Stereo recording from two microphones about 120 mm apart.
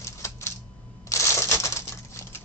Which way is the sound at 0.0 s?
25° left (ahead or behind).